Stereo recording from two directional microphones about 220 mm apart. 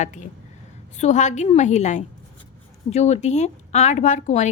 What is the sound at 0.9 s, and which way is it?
A woman's voice, 35° left (ahead or behind).